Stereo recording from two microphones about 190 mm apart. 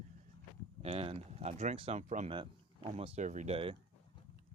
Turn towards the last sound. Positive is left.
turn(degrees=-30)  # may be behind; listen again after turning